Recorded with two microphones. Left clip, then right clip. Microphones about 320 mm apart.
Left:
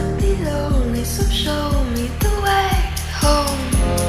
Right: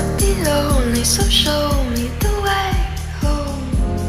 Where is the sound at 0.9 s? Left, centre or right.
Centre.